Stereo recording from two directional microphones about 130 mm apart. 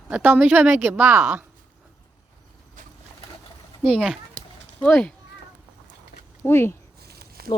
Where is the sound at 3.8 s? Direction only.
5° left (ahead or behind).